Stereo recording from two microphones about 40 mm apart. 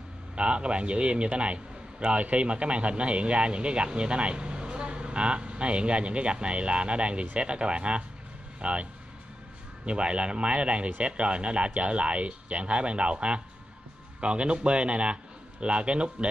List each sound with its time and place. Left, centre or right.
0.4 s a man's voice: right
9.8 s a man's voice: right